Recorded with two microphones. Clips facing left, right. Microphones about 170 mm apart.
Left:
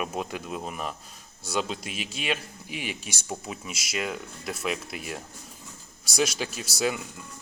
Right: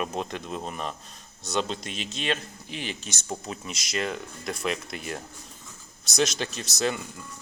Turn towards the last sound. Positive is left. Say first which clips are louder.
# even
turn(degrees=10)  # may be behind; listen again after turning